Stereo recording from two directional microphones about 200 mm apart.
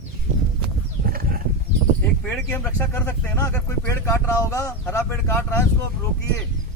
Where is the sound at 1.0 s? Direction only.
45° right (ahead or behind).